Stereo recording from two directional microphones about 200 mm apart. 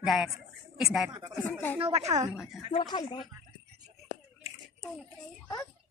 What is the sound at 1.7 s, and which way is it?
Speech, 30° right (ahead or behind).